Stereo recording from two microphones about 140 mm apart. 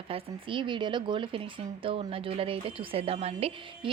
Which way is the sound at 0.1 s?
35° right (ahead or behind).